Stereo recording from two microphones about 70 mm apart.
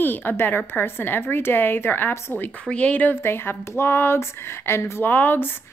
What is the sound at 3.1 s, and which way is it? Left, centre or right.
A woman's voice, left.